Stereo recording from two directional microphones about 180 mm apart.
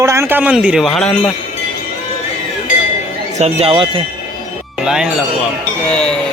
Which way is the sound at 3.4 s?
35° right (ahead or behind).